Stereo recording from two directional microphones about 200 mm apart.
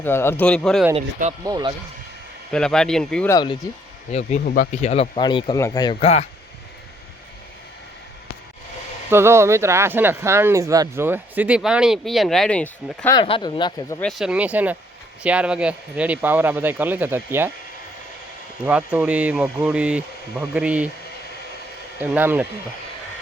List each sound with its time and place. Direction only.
0.0 s speech: 10° left (ahead or behind)
1.5 s speech: 20° right (ahead or behind)
2.5 s speech: 5° left (ahead or behind)
3.3 s speech: 25° left (ahead or behind)
4.4 s speech: 45° left (ahead or behind)
9.0 s speech: 10° right (ahead or behind); by 13.1 s 5° left (ahead or behind)
13.1 s speech: 25° left (ahead or behind)
14.0 s speech: centre (ahead or behind)
18.6 s speech: 5° right (ahead or behind)
22.0 s speech: 10° right (ahead or behind)